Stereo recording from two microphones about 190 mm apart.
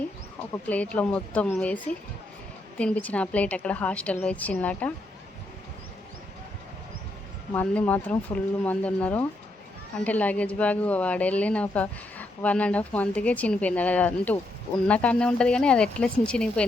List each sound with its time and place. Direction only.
0.5 s speech: 10° left (ahead or behind)
7.5 s speech: 10° left (ahead or behind)